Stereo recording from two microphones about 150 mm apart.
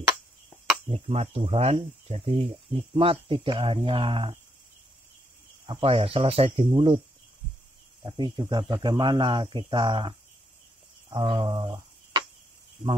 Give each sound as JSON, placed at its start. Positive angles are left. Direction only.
{"t": 0.8, "sound": "speech", "side_deg": -40}
{"t": 5.7, "sound": "speech", "side_deg": -40}
{"t": 8.0, "sound": "speech", "side_deg": -30}
{"t": 11.1, "sound": "mantra", "side_deg": -30}
{"t": 11.3, "sound": "a sound", "side_deg": -20}